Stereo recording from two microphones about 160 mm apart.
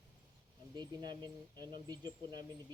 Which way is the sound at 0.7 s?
25° right (ahead or behind).